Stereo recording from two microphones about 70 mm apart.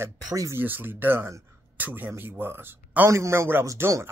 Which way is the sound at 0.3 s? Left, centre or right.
Right.